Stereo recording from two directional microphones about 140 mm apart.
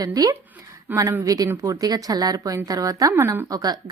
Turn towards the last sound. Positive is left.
turn(degrees=-25)  # may be behind; listen again after turning